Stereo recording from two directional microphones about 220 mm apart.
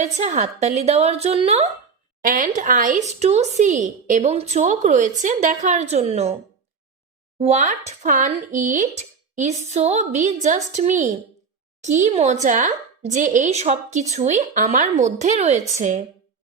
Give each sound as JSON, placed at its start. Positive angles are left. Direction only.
{"t": 0.0, "sound": "a woman's voice", "side_deg": -30}
{"t": 2.2, "sound": "speech", "side_deg": -40}
{"t": 7.3, "sound": "speech", "side_deg": -30}